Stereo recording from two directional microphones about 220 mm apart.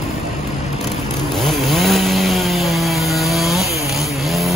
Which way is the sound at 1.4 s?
Centre (ahead or behind).